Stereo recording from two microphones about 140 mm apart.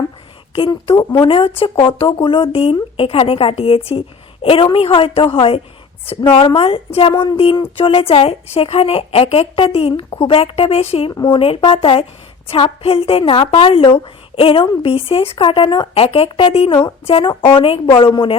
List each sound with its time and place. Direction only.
0.7 s a woman's voice: 30° left (ahead or behind)